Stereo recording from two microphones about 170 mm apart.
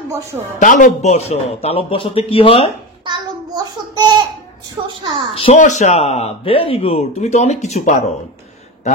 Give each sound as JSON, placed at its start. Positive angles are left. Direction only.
{"t": 0.1, "sound": "a woman's voice", "side_deg": -15}
{"t": 0.6, "sound": "speech", "side_deg": 50}
{"t": 3.1, "sound": "child singing", "side_deg": -25}
{"t": 4.8, "sound": "a woman's voice", "side_deg": -30}
{"t": 5.3, "sound": "speech", "side_deg": 35}
{"t": 5.6, "sound": "speech", "side_deg": 45}